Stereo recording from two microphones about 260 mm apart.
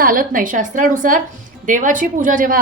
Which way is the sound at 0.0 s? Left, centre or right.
Right.